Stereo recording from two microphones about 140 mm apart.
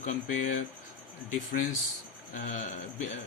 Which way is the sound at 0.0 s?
60° left (ahead or behind).